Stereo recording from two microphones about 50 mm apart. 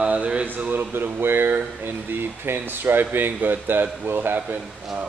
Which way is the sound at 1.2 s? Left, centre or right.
Right.